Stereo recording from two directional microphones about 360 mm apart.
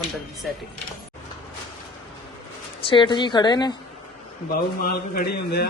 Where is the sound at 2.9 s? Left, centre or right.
Centre.